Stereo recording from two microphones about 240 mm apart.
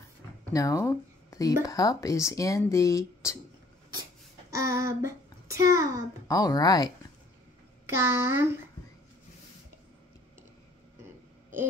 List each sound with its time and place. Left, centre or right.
0.5 s speech: centre
4.6 s child singing: centre
6.2 s speech: centre
7.9 s a child's voice: centre